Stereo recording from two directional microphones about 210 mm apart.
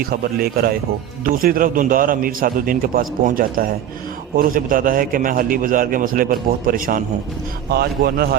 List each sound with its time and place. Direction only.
0.0 s a man's voice: 45° right (ahead or behind)